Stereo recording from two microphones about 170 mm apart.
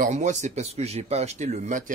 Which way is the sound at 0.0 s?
45° right (ahead or behind).